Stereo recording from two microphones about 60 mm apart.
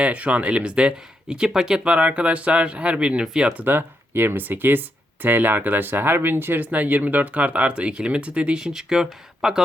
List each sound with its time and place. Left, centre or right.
0.0 s speech: right
3.6 s speech: right; by 9.6 s centre